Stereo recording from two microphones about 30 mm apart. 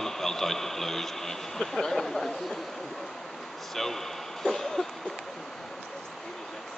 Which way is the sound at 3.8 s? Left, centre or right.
Centre.